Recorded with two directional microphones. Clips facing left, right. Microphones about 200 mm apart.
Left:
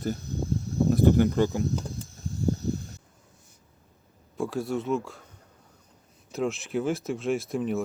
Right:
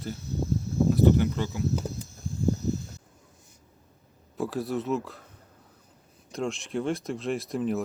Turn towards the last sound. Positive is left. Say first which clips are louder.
# left 1 dB
turn(degrees=0)  # may be behind; listen again after turning